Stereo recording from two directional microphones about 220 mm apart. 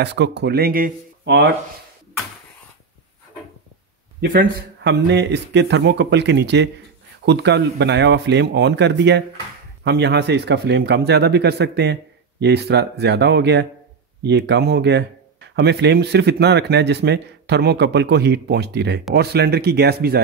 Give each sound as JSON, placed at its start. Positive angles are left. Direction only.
{"t": 0.0, "sound": "speech", "side_deg": -50}
{"t": 4.2, "sound": "speech", "side_deg": -40}